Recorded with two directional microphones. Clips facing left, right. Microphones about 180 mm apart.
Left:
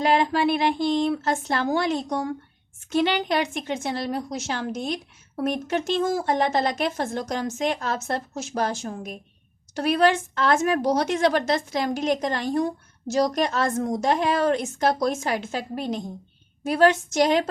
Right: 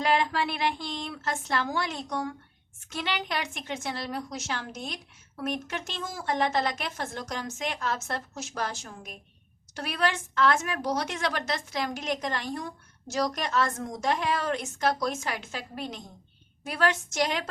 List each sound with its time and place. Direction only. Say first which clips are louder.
0.0 s a woman's voice: left 6 dB; 25° left (ahead or behind)
0.9 s a woman's voice: left 11 dB; 35° left (ahead or behind)
6.3 s speech: even; 45° left (ahead or behind)
6.7 s a woman's voice: left 7 dB; 30° left (ahead or behind)
8.7 s speech: left 10 dB; 50° left (ahead or behind)
9.7 s a woman's voice: left 9 dB; 30° left (ahead or behind)
11.3 s a woman's voice: left 9 dB; 30° left (ahead or behind)
13.4 s a woman's voice: left 5 dB; 40° left (ahead or behind)
14.0 s a woman's voice: left 5 dB; 30° left (ahead or behind)